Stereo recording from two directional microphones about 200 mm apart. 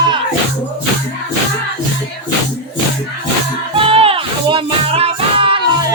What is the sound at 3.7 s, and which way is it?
Music, 30° right (ahead or behind).